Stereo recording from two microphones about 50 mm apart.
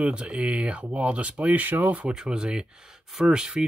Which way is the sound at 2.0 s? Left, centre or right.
Centre.